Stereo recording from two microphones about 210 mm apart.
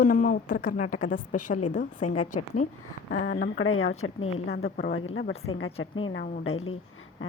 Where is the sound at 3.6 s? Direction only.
75° left (ahead or behind).